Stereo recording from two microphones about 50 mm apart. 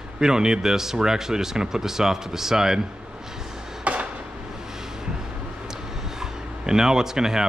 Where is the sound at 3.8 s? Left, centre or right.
Right.